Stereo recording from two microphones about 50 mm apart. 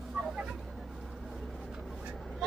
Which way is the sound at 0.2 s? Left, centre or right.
Centre.